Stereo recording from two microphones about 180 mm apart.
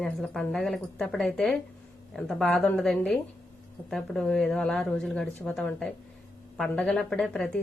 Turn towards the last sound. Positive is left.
turn(degrees=5)  # may be behind; listen again after turning